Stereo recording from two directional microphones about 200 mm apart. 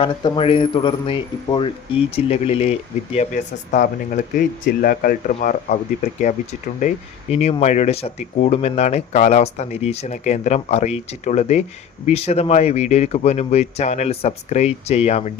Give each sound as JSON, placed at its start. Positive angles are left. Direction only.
{"t": 0.0, "sound": "speech", "side_deg": 25}